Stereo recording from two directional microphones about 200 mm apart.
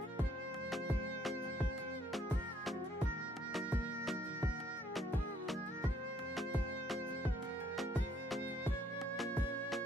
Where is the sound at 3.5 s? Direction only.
Centre (ahead or behind).